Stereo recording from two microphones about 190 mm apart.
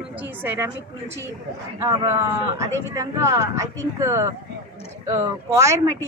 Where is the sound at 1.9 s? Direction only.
15° right (ahead or behind).